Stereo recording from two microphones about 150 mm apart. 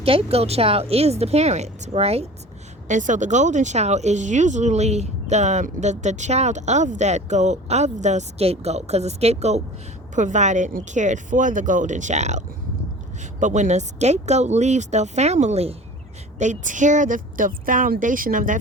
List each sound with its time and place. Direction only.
0.0 s speech: 40° right (ahead or behind)
2.8 s speech: 55° right (ahead or behind)
13.4 s speech: 55° right (ahead or behind)